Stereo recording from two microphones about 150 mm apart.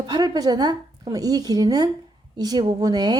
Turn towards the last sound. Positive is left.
turn(degrees=-25)  # may be behind; listen again after turning